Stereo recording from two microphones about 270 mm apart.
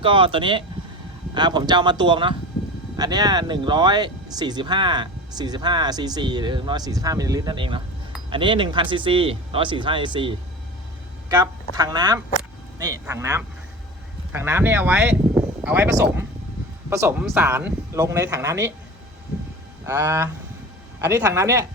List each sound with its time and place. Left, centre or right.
0.0 s speech: centre
19.8 s speech: centre